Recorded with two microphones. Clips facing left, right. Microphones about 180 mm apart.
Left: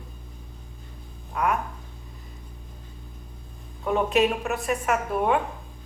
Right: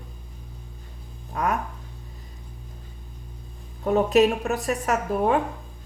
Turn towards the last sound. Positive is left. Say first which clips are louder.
# right 1 dB
turn(degrees=-40)  # may be behind; listen again after turning